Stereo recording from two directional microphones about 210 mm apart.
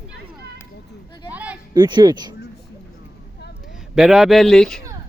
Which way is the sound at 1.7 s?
20° right (ahead or behind).